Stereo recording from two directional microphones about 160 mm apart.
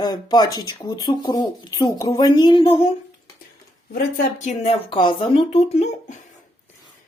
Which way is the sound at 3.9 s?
65° left (ahead or behind).